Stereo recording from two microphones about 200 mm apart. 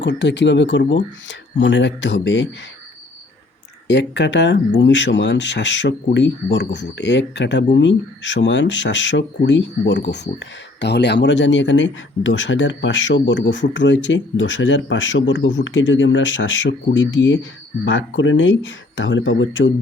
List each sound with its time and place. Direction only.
0.0 s speech: 60° left (ahead or behind)
3.8 s speech: 60° left (ahead or behind)